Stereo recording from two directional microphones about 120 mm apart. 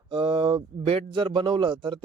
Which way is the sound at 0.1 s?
45° right (ahead or behind).